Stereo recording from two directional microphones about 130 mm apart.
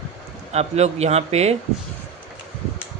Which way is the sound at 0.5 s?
55° right (ahead or behind).